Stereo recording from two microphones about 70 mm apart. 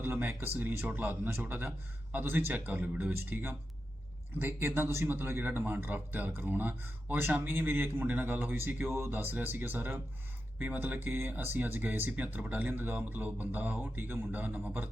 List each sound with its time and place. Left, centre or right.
0.0 s speech: right